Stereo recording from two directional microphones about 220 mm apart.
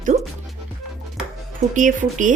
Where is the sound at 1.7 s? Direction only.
35° right (ahead or behind).